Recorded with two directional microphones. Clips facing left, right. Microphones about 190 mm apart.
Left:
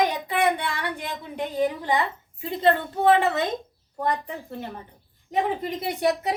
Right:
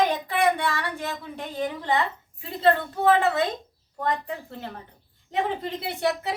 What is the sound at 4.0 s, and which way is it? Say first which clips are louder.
Speech: left 1 dB; 15° left (ahead or behind).